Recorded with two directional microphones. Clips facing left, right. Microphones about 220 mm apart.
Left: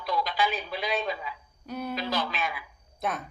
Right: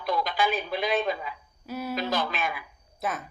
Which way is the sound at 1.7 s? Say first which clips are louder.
Right 1 dB; 5° right (ahead or behind).